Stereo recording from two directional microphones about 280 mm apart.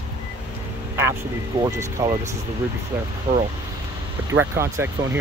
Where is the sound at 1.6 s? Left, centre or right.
Centre.